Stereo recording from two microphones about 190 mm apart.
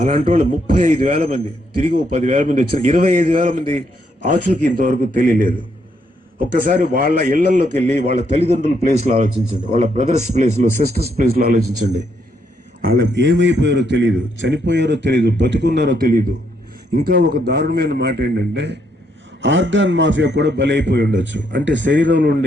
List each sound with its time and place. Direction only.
0.3 s a man's voice: 35° right (ahead or behind)
3.6 s a man's voice: 30° right (ahead or behind)
11.3 s a man's voice: 55° right (ahead or behind)
11.5 s a man's voice: 40° right (ahead or behind)
12.8 s a man's voice: 55° right (ahead or behind); by 22.2 s 70° right (ahead or behind)
22.2 s a man's voice: 55° right (ahead or behind)